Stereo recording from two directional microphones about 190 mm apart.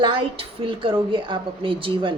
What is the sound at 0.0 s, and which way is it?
A woman's voice, 25° right (ahead or behind).